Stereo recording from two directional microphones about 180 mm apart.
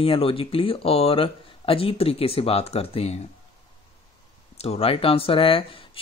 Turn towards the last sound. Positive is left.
turn(degrees=30)  # may be behind; listen again after turning